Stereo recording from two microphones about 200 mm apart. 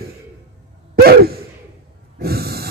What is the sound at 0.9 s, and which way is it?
Gasp, 50° right (ahead or behind).